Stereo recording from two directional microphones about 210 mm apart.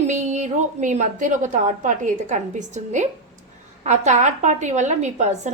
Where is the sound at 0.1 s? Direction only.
35° right (ahead or behind).